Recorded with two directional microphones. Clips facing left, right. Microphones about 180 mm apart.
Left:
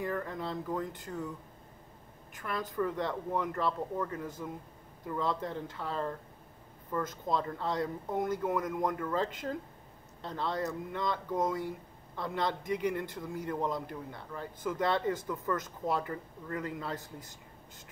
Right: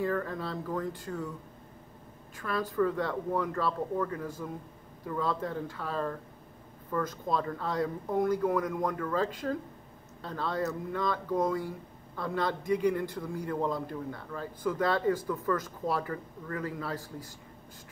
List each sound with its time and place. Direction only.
0.0 s a man's voice: 15° left (ahead or behind)
2.3 s a man's voice: 20° left (ahead or behind)